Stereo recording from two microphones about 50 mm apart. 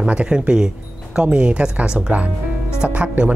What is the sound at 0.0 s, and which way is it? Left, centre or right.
Speech, right.